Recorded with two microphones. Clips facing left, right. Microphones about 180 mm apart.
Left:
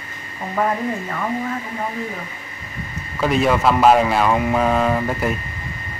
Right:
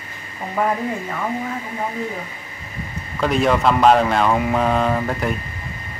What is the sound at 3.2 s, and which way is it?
Speech, centre (ahead or behind).